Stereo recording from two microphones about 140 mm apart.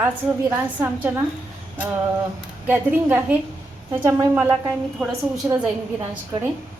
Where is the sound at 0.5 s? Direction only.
15° right (ahead or behind).